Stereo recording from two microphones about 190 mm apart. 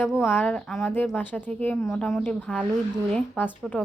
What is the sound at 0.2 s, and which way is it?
A woman's voice, 10° left (ahead or behind).